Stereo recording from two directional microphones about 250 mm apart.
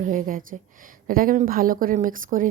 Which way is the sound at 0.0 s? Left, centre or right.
Right.